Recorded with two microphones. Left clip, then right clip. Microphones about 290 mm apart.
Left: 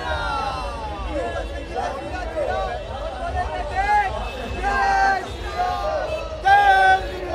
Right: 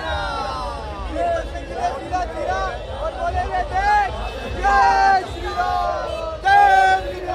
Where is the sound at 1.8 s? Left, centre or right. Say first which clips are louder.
Right 8 dB; right.